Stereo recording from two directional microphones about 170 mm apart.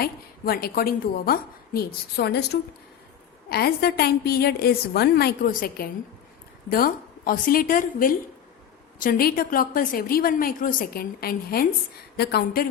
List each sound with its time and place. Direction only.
0.0 s a woman's voice: 65° left (ahead or behind)